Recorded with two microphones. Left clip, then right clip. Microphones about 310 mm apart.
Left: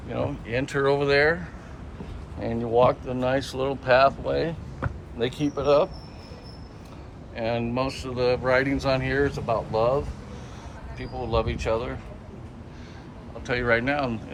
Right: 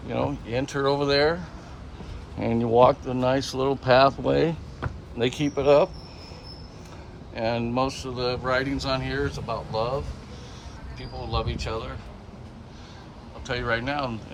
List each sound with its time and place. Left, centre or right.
0.1 s a sound: centre
0.5 s speech: centre
2.4 s speech: right
7.3 s speech: centre
11.0 s speech: centre
13.5 s speech: centre